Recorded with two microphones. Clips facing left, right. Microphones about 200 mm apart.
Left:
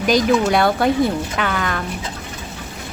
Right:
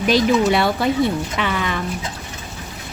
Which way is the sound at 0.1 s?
Centre (ahead or behind).